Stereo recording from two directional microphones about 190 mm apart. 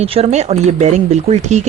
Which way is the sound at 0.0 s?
35° right (ahead or behind).